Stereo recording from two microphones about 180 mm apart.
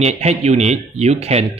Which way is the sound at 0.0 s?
35° right (ahead or behind).